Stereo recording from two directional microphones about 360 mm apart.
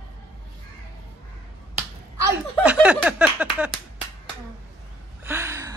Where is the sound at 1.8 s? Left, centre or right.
Centre.